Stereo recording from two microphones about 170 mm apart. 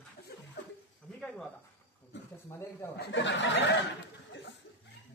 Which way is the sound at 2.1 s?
90° left.